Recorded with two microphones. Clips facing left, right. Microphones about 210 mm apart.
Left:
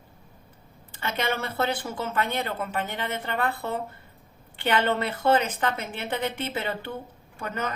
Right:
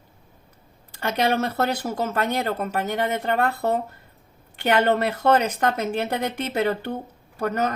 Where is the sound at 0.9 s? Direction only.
40° right (ahead or behind).